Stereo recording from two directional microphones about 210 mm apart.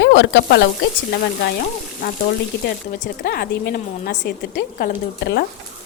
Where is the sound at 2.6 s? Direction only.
45° left (ahead or behind).